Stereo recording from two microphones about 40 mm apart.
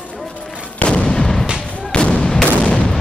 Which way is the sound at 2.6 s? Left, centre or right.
Left.